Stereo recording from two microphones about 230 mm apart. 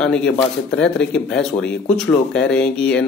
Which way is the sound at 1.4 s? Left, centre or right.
Centre.